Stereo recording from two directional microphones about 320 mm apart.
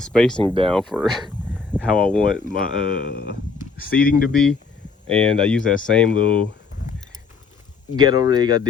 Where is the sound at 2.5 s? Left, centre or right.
Left.